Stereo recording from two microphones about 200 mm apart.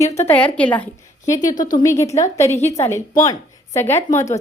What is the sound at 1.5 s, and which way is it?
Speech, 40° left (ahead or behind).